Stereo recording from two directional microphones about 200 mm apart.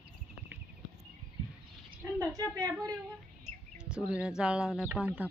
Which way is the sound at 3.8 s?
5° right (ahead or behind).